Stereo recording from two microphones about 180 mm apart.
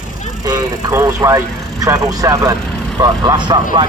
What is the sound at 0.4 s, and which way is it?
Speech, 20° right (ahead or behind).